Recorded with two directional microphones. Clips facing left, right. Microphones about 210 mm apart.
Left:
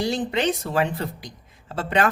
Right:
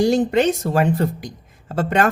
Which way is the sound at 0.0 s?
45° right (ahead or behind).